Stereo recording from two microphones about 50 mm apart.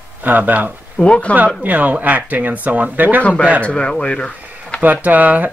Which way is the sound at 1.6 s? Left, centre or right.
Right.